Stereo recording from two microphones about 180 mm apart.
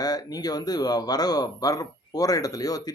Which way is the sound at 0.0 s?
20° left (ahead or behind).